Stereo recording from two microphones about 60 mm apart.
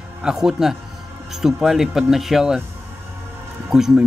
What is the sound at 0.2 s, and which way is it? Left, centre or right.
Speech, centre.